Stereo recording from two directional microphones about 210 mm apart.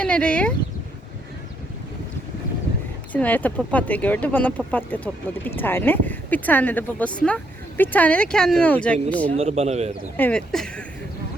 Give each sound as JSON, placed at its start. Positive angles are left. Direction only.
{"t": 0.0, "sound": "speech", "side_deg": 5}
{"t": 3.1, "sound": "speech", "side_deg": 5}
{"t": 9.3, "sound": "speech", "side_deg": -30}
{"t": 10.2, "sound": "speech", "side_deg": 5}